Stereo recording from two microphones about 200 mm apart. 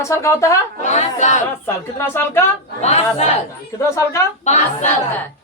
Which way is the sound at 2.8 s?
30° left (ahead or behind).